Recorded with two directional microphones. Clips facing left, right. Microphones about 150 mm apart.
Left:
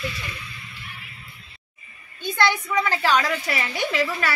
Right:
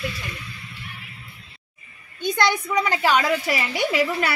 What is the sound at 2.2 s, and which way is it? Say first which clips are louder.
A woman's voice: right 1 dB; 15° right (ahead or behind).